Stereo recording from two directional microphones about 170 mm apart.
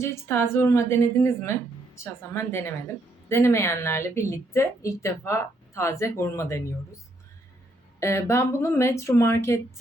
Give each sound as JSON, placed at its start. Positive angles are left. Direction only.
{"t": 0.0, "sound": "speech", "side_deg": 15}
{"t": 7.9, "sound": "speech", "side_deg": 15}